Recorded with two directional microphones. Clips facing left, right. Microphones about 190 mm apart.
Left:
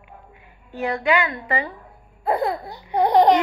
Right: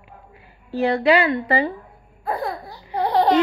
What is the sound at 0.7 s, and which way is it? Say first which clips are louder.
A woman's voice: right 4 dB; 35° right (ahead or behind).